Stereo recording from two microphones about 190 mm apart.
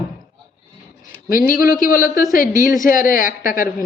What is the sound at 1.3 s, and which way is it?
Speech, 50° left (ahead or behind).